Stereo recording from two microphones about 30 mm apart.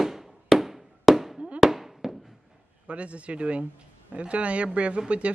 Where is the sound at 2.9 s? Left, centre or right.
Right.